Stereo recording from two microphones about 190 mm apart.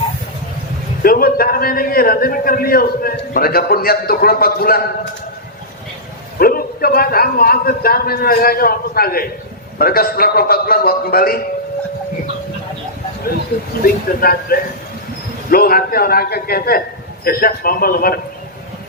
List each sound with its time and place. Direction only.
1.0 s a man's voice: 50° left (ahead or behind)
6.4 s a man's voice: 50° left (ahead or behind)
13.8 s a man's voice: 50° left (ahead or behind)